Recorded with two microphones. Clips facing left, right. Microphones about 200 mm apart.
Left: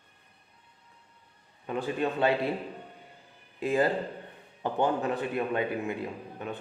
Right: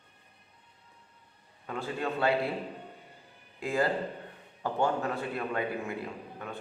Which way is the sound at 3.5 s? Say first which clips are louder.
Left 3 dB; 20° left (ahead or behind).